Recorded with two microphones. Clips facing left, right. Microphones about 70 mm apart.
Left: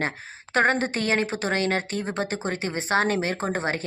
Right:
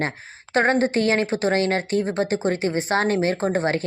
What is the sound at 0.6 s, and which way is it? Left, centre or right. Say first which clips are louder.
A woman's voice: right 3 dB; right.